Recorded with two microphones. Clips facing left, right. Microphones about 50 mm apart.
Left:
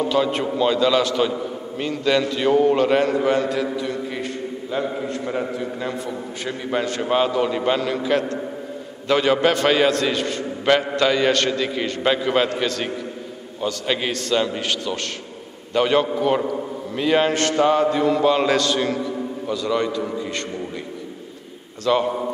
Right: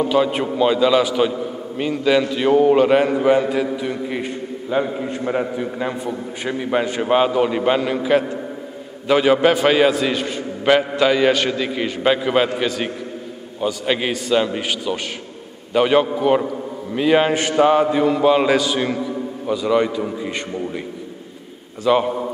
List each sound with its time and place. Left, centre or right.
0.0 s a man's voice: centre
21.8 s a man's voice: centre